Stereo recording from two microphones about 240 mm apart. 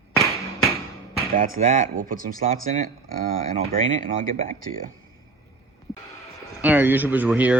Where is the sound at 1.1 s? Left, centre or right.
Right.